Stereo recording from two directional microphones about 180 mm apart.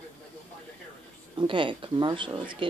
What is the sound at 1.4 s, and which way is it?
Speech, 25° right (ahead or behind).